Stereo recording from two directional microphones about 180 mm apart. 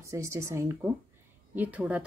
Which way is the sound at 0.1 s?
15° right (ahead or behind).